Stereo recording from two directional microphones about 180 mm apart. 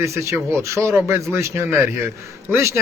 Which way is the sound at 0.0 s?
15° right (ahead or behind).